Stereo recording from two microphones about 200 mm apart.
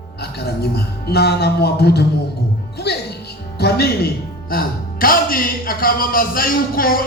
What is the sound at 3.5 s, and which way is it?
Speech, 55° left (ahead or behind).